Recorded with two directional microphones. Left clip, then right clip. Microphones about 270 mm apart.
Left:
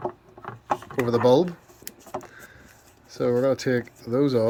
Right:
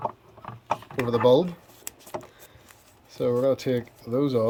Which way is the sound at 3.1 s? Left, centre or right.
Centre.